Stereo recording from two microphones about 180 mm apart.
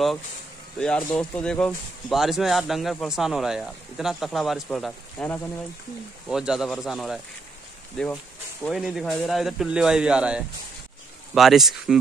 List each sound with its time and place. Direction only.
0.7 s speech: 5° left (ahead or behind)